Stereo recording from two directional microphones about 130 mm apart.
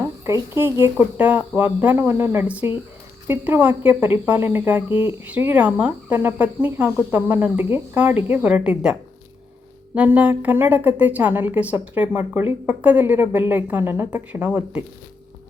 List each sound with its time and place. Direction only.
0.0 s a woman's voice: 20° right (ahead or behind)